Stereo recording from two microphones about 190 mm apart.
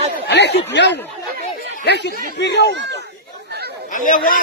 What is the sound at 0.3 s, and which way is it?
Speech, 60° left (ahead or behind).